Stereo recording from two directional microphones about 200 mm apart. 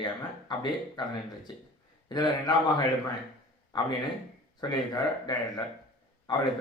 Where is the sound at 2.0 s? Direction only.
20° left (ahead or behind).